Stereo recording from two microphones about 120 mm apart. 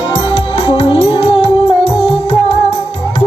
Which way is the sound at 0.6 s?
50° left (ahead or behind).